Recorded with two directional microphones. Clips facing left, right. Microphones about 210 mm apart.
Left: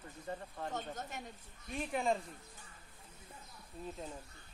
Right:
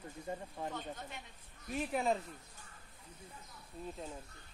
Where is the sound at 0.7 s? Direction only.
45° left (ahead or behind).